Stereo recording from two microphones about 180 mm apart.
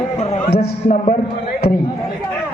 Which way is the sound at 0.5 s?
55° left (ahead or behind).